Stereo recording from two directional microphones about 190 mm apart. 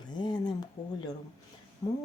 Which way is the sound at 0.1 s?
20° left (ahead or behind).